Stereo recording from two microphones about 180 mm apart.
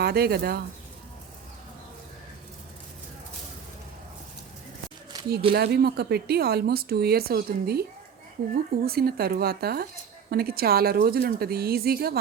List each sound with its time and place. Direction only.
0.0 s speech: 60° right (ahead or behind)
5.1 s a sound: 20° right (ahead or behind)
5.5 s speech: 65° right (ahead or behind)